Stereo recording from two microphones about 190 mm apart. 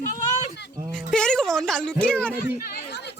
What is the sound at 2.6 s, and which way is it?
Chatter, 60° left (ahead or behind).